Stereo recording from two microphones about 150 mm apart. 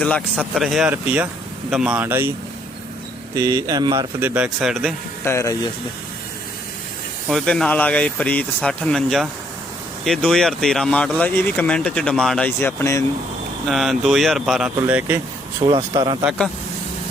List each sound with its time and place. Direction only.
0.0 s speech: 5° left (ahead or behind)
0.9 s speech: 10° right (ahead or behind)
3.3 s speech: 25° right (ahead or behind)
4.2 s speech: 10° right (ahead or behind)
5.2 s speech: 20° left (ahead or behind)
7.3 s speech: 5° left (ahead or behind)
12.5 s speech: 15° left (ahead or behind)
13.7 s speech: centre (ahead or behind)
14.8 s speech: 10° right (ahead or behind)
15.6 s speech: 35° right (ahead or behind)